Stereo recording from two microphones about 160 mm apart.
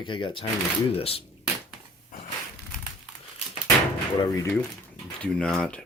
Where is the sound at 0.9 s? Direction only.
35° left (ahead or behind).